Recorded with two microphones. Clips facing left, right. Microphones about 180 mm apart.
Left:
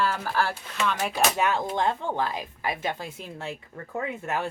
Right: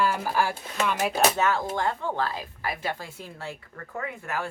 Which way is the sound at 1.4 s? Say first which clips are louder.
Even; 20° left (ahead or behind).